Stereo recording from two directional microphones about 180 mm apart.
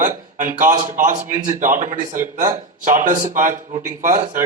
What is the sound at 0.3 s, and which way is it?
Speech, 45° right (ahead or behind).